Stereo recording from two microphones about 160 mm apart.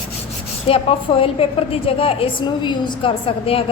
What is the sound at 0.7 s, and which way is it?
A woman's voice, 35° left (ahead or behind).